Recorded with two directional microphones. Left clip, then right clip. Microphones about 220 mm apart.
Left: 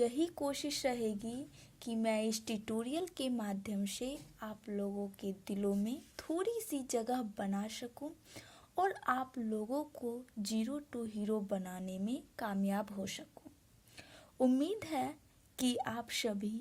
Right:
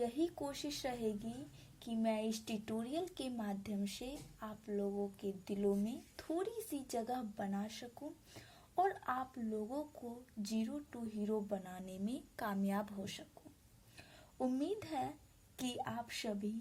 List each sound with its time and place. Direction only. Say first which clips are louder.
0.0 s a woman's voice: left 5 dB; 35° left (ahead or behind)
13.9 s a sound: left 4 dB; 35° left (ahead or behind)
15.5 s a woman's voice: left 5 dB; 35° left (ahead or behind)